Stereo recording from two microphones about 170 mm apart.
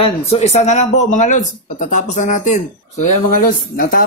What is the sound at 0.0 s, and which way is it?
Speech, 35° left (ahead or behind).